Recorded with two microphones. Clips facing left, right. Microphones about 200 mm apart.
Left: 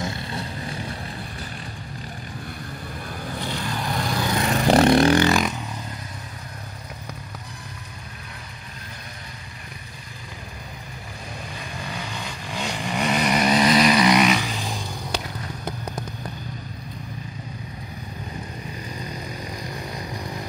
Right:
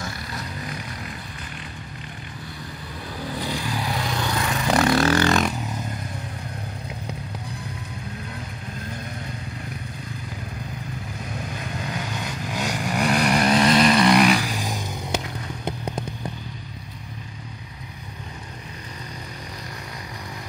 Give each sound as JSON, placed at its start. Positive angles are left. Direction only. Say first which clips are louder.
{"t": 0.0, "sound": "vehicle", "louder": "left 4 dB", "side_deg": 25}
{"t": 3.4, "sound": "vehicle", "louder": "even", "side_deg": -10}
{"t": 4.4, "sound": "vehicle", "louder": "left 5 dB", "side_deg": 35}
{"t": 11.8, "sound": "vehicle", "louder": "right 1 dB", "side_deg": 0}
{"t": 14.6, "sound": "a sound", "louder": "right 1 dB", "side_deg": -15}